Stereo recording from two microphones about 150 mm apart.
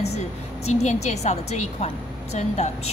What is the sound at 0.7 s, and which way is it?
Speech, 50° left (ahead or behind).